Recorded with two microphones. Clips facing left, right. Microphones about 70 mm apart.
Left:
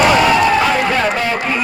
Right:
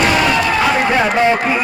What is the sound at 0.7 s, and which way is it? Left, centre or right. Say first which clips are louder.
Speech: right 1 dB; centre.